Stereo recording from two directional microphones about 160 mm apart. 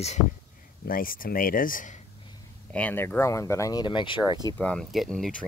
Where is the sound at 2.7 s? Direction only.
10° left (ahead or behind); by 4.2 s 30° left (ahead or behind).